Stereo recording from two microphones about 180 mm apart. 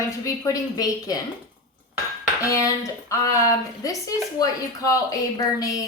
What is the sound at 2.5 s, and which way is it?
Speech, 20° left (ahead or behind).